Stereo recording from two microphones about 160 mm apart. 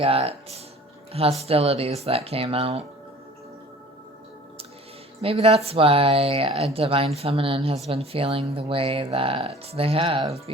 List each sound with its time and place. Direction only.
0.0 s speech: 35° right (ahead or behind)
5.2 s speech: 35° right (ahead or behind)